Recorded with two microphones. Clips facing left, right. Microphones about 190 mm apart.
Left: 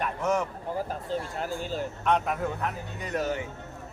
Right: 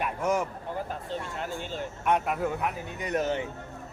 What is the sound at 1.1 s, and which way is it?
Speech, 40° left (ahead or behind).